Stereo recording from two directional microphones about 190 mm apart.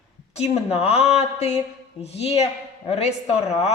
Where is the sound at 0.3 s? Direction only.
35° left (ahead or behind).